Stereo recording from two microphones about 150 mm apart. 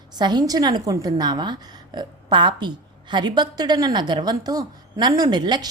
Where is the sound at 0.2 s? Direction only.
30° right (ahead or behind).